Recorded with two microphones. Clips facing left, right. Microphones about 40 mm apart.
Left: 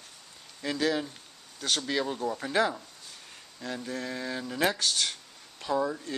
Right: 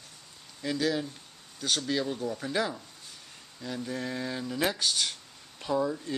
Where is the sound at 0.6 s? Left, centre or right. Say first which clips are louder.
Left 1 dB; centre.